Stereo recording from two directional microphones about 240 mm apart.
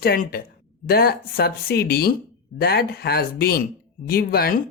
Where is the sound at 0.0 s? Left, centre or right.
Left.